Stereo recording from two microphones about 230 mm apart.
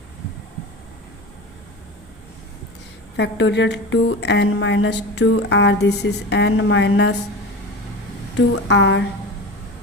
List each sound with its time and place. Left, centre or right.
3.2 s speech: left
8.4 s speech: left